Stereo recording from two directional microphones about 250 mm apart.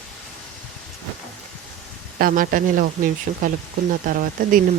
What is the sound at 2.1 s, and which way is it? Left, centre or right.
Speech, right.